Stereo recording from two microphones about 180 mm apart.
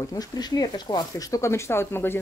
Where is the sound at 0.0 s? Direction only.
20° left (ahead or behind).